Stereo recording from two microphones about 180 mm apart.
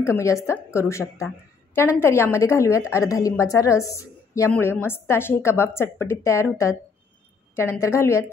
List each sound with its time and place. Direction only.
0.0 s a woman's voice: 15° left (ahead or behind)
7.8 s a woman's voice: 15° left (ahead or behind)